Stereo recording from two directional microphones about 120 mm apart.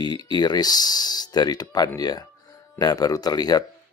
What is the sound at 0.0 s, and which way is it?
Speech, 35° left (ahead or behind).